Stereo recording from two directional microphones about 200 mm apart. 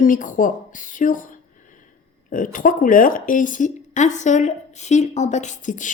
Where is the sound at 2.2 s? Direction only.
40° left (ahead or behind).